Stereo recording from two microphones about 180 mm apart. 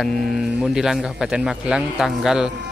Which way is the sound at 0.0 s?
Centre (ahead or behind).